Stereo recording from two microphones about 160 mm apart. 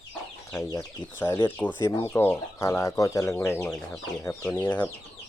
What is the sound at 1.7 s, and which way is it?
Speech, 25° left (ahead or behind).